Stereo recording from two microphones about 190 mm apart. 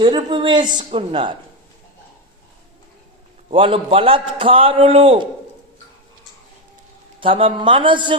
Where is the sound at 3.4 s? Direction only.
30° right (ahead or behind).